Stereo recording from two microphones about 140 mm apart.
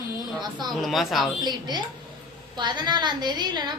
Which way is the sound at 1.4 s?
30° right (ahead or behind).